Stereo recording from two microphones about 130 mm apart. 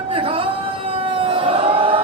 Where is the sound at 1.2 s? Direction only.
45° right (ahead or behind).